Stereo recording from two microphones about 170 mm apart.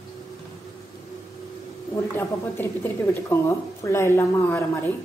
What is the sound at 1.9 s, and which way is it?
A woman's voice, 15° left (ahead or behind).